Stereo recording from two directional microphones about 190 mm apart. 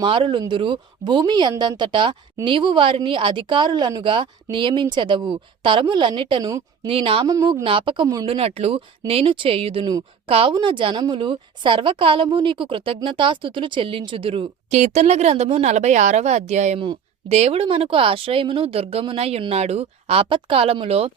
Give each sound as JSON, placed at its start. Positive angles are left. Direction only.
{"t": 0.0, "sound": "speech", "side_deg": -25}